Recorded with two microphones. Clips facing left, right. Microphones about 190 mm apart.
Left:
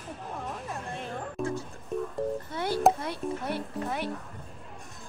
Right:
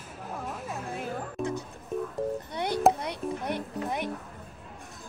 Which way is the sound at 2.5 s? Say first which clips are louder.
Even; 20° right (ahead or behind).